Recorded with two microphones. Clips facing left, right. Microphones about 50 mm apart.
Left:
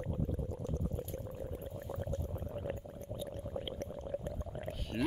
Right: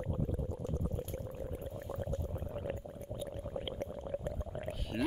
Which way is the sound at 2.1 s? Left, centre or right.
Centre.